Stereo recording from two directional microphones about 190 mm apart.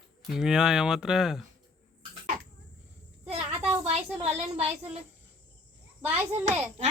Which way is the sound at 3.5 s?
10° right (ahead or behind).